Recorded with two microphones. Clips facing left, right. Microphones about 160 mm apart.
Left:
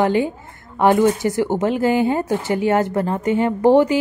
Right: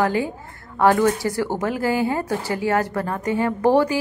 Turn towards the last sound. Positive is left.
turn(degrees=20)  # may be behind; listen again after turning